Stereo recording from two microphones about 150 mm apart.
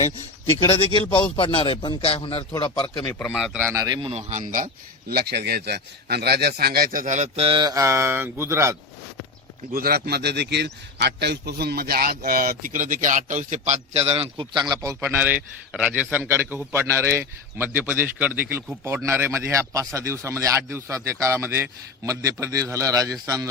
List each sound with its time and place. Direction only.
0.4 s a man's voice: 40° left (ahead or behind)
2.5 s speech: 30° left (ahead or behind)
3.1 s a man's voice: 10° left (ahead or behind)
3.3 s a man's voice: centre (ahead or behind)
3.6 s a man's voice: 15° right (ahead or behind)
3.8 s speech: 30° right (ahead or behind)
4.1 s speech: 50° right (ahead or behind); by 7.7 s 35° right (ahead or behind)
7.7 s a man's voice: 20° right (ahead or behind)
9.7 s a man's voice: 85° right; by 14.9 s 25° right (ahead or behind)
15.0 s a man's voice: 15° right (ahead or behind)